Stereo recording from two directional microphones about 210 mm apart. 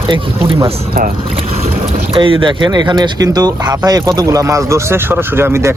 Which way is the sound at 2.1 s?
25° right (ahead or behind).